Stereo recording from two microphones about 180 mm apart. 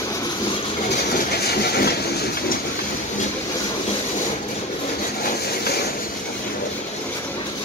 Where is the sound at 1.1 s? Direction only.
60° left (ahead or behind).